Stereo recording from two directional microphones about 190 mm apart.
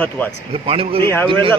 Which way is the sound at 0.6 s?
30° right (ahead or behind).